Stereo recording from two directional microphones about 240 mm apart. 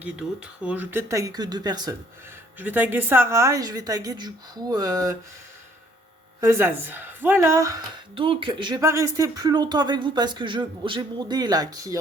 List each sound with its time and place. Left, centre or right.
0.0 s a woman's voice: centre
6.4 s a woman's voice: centre